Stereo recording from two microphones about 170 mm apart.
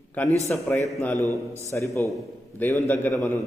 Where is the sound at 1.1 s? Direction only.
20° right (ahead or behind).